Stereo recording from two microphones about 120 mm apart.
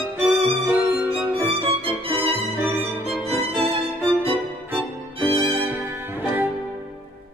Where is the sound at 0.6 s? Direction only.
15° right (ahead or behind).